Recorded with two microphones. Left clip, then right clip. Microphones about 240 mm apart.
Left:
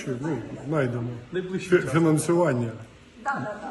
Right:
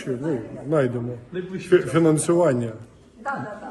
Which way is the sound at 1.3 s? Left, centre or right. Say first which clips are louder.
Left 2 dB; left.